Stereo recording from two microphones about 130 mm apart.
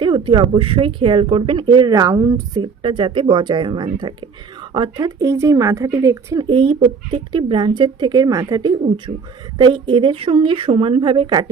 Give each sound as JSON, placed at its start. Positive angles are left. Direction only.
{"t": 0.0, "sound": "speech", "side_deg": -40}
{"t": 2.8, "sound": "speech", "side_deg": -40}
{"t": 5.2, "sound": "speech", "side_deg": -25}
{"t": 6.4, "sound": "speech", "side_deg": -35}
{"t": 9.1, "sound": "speech", "side_deg": -40}